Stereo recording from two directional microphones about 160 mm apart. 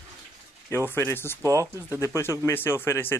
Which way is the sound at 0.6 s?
15° left (ahead or behind).